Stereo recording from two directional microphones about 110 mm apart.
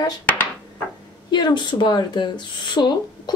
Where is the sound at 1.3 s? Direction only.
45° left (ahead or behind).